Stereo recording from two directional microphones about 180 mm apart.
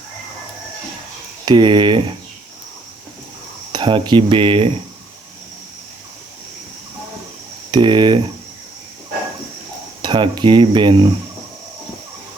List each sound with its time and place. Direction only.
1.5 s speech: 25° right (ahead or behind)
3.7 s speech: 25° right (ahead or behind)
7.7 s speech: 25° right (ahead or behind)
10.0 s speech: 25° right (ahead or behind)